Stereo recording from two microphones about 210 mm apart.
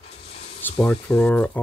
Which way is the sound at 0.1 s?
30° left (ahead or behind).